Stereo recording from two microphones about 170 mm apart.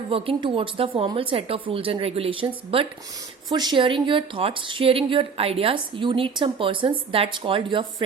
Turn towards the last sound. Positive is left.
turn(degrees=-30)  # may be behind; listen again after turning